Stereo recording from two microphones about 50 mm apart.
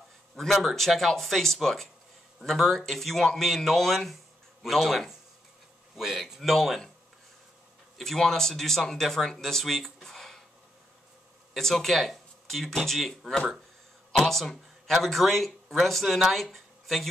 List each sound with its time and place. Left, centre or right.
0.4 s speech: centre
8.0 s speech: centre
11.5 s speech: centre
14.3 s speech: centre